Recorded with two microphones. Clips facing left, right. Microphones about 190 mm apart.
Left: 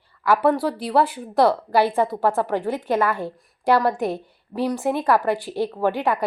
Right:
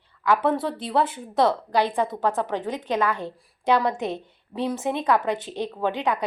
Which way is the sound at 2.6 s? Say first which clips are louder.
Left 4 dB; 20° right (ahead or behind).